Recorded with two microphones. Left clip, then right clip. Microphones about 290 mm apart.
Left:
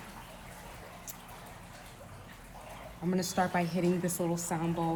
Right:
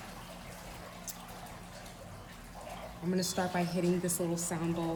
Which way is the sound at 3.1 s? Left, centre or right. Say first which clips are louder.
Left 3 dB; left.